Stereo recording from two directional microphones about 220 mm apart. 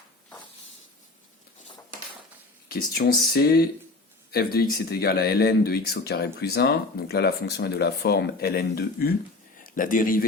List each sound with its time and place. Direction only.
2.6 s speech: 45° left (ahead or behind)